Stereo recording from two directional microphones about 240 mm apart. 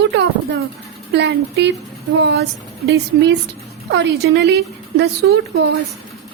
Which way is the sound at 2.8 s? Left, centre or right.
Right.